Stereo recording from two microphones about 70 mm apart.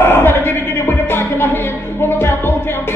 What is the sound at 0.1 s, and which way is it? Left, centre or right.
Music, left.